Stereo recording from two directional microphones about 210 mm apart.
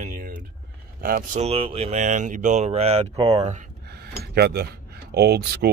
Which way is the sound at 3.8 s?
50° right (ahead or behind).